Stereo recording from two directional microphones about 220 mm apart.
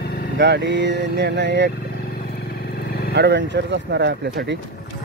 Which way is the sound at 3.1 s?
50° right (ahead or behind).